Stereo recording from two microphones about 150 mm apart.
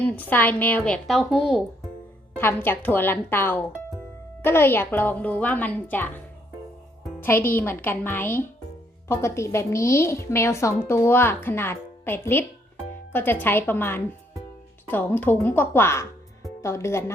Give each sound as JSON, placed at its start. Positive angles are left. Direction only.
{"t": 0.0, "sound": "a woman's voice", "side_deg": 10}
{"t": 2.4, "sound": "a woman's voice", "side_deg": 15}